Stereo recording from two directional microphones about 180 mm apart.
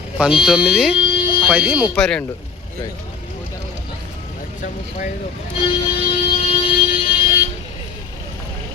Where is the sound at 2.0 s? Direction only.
5° left (ahead or behind).